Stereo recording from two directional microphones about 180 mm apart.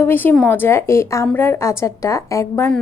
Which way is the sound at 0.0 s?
10° left (ahead or behind).